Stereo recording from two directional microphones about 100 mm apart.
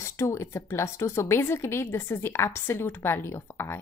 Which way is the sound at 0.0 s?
30° left (ahead or behind).